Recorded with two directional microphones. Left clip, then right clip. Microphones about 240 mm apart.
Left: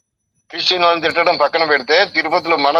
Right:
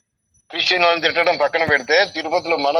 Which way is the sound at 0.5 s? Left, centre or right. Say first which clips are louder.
Left 2 dB; left.